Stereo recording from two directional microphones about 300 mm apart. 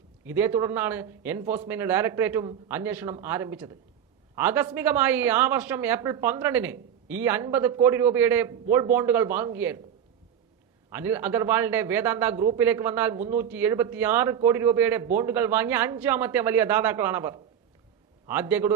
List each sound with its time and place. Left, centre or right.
0.3 s a man's voice: centre
10.8 s a man's voice: centre